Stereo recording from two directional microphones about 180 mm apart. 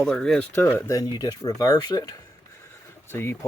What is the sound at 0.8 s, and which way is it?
Speech, 20° left (ahead or behind).